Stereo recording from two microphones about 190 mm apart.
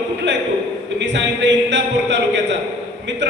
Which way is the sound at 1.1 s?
70° right (ahead or behind).